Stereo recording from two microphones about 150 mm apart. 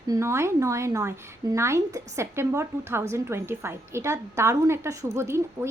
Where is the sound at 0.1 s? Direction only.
20° right (ahead or behind).